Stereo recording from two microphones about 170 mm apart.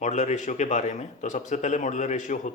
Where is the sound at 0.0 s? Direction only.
45° left (ahead or behind).